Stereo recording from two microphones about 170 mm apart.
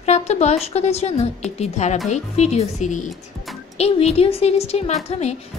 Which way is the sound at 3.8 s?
35° left (ahead or behind).